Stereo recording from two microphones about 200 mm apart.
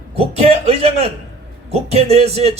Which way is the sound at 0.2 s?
30° right (ahead or behind).